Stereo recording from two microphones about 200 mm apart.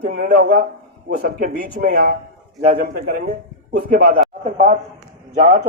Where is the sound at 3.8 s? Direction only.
45° right (ahead or behind).